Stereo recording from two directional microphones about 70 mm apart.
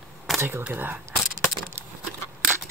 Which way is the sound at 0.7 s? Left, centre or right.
Right.